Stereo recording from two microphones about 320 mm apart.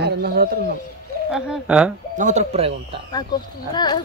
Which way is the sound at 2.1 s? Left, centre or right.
Right.